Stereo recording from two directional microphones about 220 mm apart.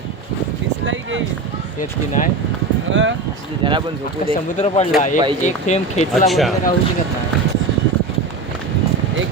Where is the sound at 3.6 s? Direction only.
20° right (ahead or behind).